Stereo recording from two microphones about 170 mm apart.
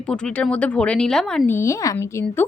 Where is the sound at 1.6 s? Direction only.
15° left (ahead or behind).